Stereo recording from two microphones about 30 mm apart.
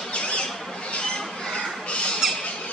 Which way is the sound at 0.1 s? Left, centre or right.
Left.